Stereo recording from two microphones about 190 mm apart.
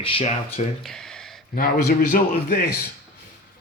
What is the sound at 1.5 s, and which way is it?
Speech, 50° left (ahead or behind).